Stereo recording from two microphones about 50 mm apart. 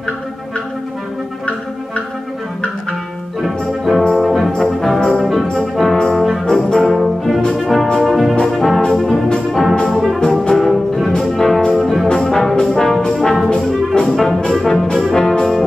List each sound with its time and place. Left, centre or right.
3.4 s music: centre
4.1 s brass instrument: centre
10.4 s music: centre
12.1 s brass instrument: centre
14.0 s brass instrument: centre
14.5 s brass instrument: centre